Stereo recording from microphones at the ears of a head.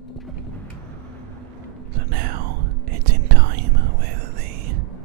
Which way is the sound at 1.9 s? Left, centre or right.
Right.